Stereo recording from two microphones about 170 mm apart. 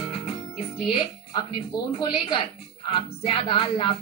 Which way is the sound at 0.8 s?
30° left (ahead or behind).